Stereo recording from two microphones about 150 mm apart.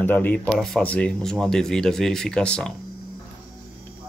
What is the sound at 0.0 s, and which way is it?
Speech, 10° left (ahead or behind).